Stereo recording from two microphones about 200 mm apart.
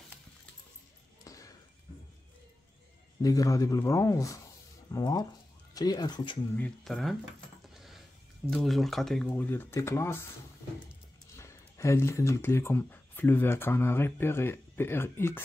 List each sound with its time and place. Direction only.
1.2 s basketball bounce: 15° left (ahead or behind)
3.2 s speech: 15° left (ahead or behind)
6.5 s speech: 5° left (ahead or behind)
7.7 s a sound: centre (ahead or behind)
8.5 s speech: centre (ahead or behind)
11.3 s speech: 15° left (ahead or behind)